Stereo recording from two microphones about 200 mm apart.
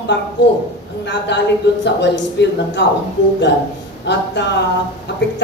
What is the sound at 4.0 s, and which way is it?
Speech, 60° left (ahead or behind).